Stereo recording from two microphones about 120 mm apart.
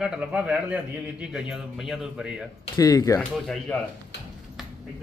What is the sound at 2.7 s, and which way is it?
Speech, 30° left (ahead or behind).